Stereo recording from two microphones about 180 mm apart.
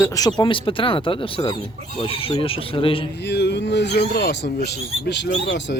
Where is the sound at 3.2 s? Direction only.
70° left (ahead or behind).